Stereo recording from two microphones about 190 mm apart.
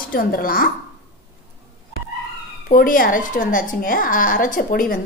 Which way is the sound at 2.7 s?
45° left (ahead or behind).